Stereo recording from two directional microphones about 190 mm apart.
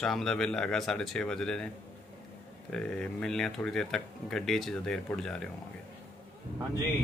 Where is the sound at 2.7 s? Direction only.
5° left (ahead or behind).